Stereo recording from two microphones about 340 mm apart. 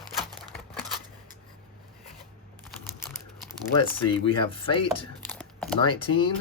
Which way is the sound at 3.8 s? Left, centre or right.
Centre.